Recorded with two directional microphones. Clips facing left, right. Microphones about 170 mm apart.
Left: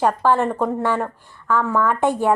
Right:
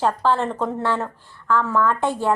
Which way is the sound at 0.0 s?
15° left (ahead or behind).